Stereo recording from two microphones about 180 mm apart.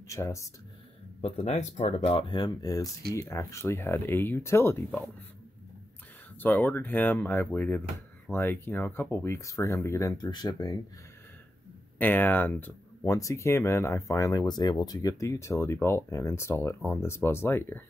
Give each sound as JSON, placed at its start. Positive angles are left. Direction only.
{"t": 0.1, "sound": "speech", "side_deg": 15}
{"t": 1.2, "sound": "speech", "side_deg": 35}
{"t": 6.4, "sound": "speech", "side_deg": 10}
{"t": 12.0, "sound": "speech", "side_deg": 10}